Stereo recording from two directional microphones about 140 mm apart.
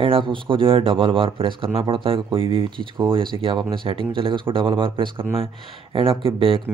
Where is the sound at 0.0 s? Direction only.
35° right (ahead or behind).